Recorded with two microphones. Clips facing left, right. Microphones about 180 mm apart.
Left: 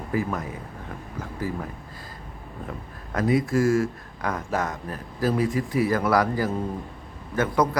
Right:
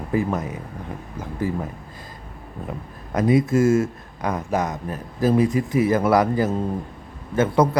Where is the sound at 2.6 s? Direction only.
20° right (ahead or behind).